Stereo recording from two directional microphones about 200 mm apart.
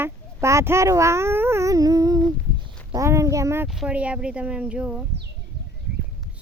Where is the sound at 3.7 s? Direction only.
5° right (ahead or behind).